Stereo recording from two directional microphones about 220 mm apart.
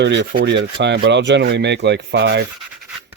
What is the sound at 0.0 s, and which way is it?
Rub, 55° right (ahead or behind).